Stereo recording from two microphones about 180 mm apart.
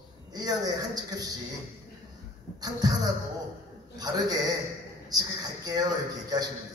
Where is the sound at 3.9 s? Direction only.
20° right (ahead or behind).